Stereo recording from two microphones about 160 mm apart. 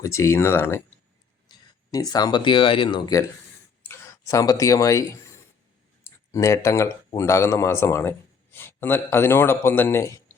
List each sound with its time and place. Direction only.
0.0 s speech: 20° left (ahead or behind)
3.8 s speech: 20° left (ahead or behind)